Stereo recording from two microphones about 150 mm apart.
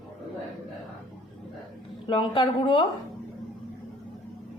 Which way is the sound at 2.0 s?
35° left (ahead or behind).